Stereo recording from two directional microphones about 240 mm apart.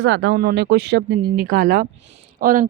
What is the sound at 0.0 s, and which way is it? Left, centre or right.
A woman's voice, right.